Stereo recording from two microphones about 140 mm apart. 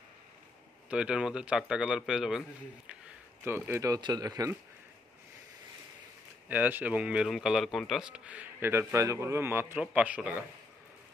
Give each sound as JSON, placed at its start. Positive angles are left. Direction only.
{"t": 0.8, "sound": "speech", "side_deg": -5}
{"t": 3.4, "sound": "speech", "side_deg": -15}
{"t": 6.5, "sound": "speech", "side_deg": -10}